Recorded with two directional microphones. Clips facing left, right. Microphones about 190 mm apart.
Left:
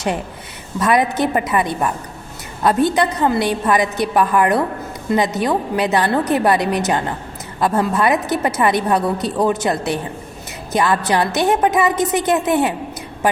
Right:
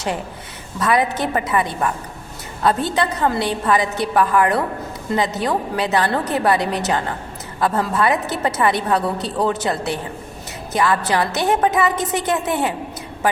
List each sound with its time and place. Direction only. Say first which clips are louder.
0.8 s a woman's voice: left 3 dB; 20° left (ahead or behind)